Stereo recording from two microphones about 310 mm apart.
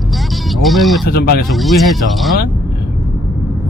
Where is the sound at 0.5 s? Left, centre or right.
Centre.